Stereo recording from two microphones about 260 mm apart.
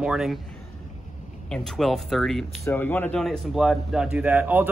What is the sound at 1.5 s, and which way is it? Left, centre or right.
Speech, centre.